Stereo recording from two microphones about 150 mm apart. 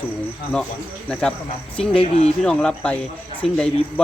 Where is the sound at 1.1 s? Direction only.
5° left (ahead or behind).